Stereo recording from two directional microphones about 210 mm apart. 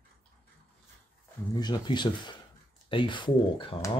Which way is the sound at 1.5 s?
20° left (ahead or behind).